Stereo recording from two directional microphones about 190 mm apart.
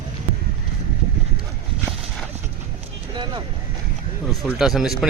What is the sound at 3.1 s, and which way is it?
Vehicle, 25° right (ahead or behind).